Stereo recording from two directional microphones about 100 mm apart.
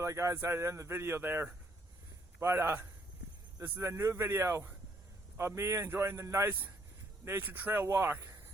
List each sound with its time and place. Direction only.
0.0 s speech: 30° right (ahead or behind)